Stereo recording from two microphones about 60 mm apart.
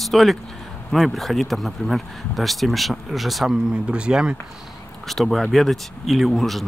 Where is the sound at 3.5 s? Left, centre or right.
Centre.